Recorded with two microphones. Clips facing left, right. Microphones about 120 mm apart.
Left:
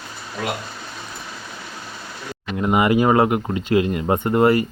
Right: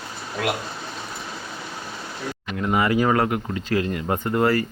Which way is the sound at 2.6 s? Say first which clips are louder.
Left 3 dB; 20° left (ahead or behind).